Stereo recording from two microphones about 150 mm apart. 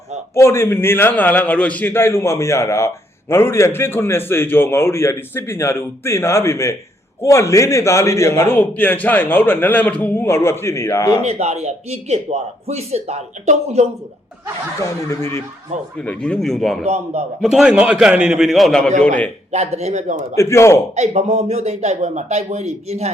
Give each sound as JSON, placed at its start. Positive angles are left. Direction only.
{"t": 0.3, "sound": "a man's voice", "side_deg": 15}
{"t": 11.2, "sound": "speech", "side_deg": -45}
{"t": 14.8, "sound": "speech", "side_deg": 20}
{"t": 16.0, "sound": "a man's voice", "side_deg": 10}
{"t": 16.8, "sound": "speech", "side_deg": -45}
{"t": 17.4, "sound": "a man's voice", "side_deg": -5}
{"t": 19.5, "sound": "speech", "side_deg": -45}
{"t": 20.3, "sound": "speech", "side_deg": 20}
{"t": 20.9, "sound": "speech", "side_deg": -50}